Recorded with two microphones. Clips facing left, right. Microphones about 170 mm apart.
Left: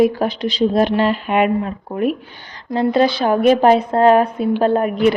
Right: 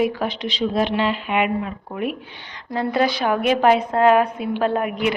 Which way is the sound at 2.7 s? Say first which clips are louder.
Left 5 dB; 25° left (ahead or behind).